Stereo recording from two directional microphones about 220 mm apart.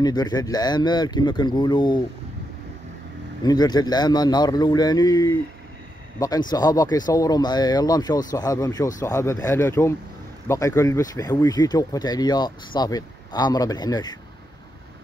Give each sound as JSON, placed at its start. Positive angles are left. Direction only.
{"t": 0.0, "sound": "speech", "side_deg": 20}
{"t": 3.4, "sound": "speech", "side_deg": 20}